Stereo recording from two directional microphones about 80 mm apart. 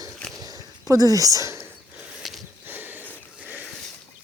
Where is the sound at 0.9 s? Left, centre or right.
Right.